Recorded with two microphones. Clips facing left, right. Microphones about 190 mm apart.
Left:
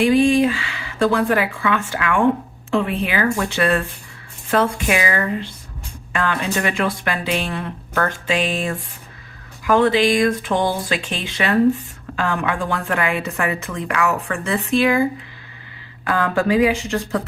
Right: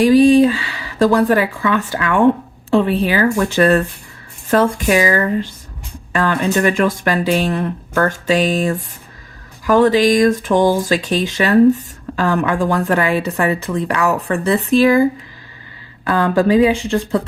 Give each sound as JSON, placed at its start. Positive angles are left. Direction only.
{"t": 0.0, "sound": "speech", "side_deg": -35}
{"t": 16.0, "sound": "speech", "side_deg": -30}